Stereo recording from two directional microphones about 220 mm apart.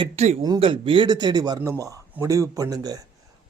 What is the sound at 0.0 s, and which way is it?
Speech, 30° right (ahead or behind).